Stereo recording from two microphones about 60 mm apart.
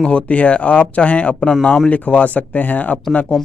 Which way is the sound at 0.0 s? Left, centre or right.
Left.